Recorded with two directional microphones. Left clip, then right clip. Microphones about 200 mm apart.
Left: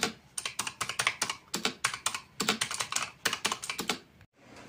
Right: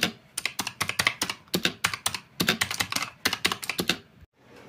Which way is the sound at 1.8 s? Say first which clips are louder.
Right 4 dB; 40° right (ahead or behind).